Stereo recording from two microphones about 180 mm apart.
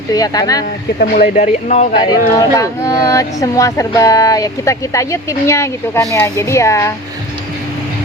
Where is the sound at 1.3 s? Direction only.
40° left (ahead or behind).